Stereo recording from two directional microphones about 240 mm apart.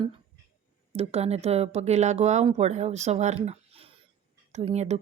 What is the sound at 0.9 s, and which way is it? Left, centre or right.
Speech, right.